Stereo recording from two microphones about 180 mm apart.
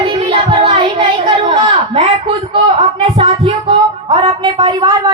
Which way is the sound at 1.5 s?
30° right (ahead or behind).